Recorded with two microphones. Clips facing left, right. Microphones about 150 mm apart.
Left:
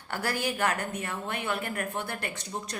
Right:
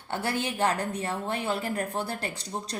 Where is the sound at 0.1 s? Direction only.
25° right (ahead or behind).